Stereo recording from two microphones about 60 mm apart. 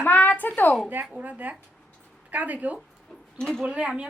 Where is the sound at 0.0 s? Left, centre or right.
Left.